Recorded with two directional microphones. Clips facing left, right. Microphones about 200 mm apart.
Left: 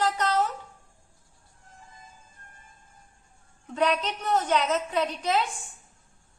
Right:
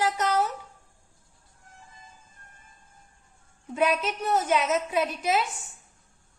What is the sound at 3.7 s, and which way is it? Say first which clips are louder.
A woman's voice: right 1 dB; 5° right (ahead or behind).